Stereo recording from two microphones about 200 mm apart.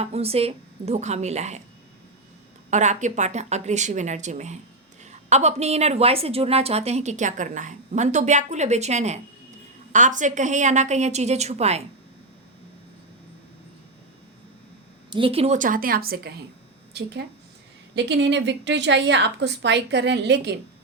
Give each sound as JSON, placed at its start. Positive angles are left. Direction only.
{"t": 0.0, "sound": "a woman's voice", "side_deg": -30}
{"t": 2.6, "sound": "a woman's voice", "side_deg": -35}
{"t": 15.1, "sound": "a woman's voice", "side_deg": -25}
{"t": 17.9, "sound": "a woman's voice", "side_deg": -60}